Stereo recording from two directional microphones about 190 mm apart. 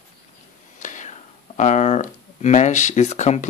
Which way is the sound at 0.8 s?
40° left (ahead or behind).